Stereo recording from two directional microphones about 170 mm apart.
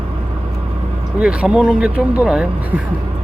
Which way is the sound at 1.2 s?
5° right (ahead or behind).